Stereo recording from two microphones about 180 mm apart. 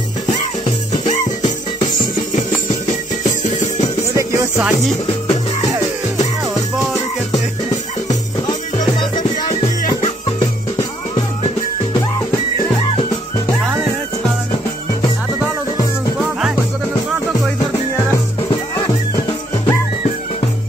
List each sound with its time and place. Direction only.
1.8 s music: 45° left (ahead or behind)
4.6 s music: 5° right (ahead or behind)
16.2 s music: 5° right (ahead or behind)